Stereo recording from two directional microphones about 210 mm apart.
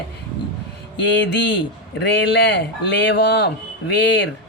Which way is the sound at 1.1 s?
55° left (ahead or behind).